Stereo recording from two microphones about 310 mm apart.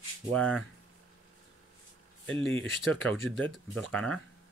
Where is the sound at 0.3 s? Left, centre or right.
Centre.